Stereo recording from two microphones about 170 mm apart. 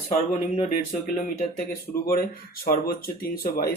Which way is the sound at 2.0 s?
60° left (ahead or behind).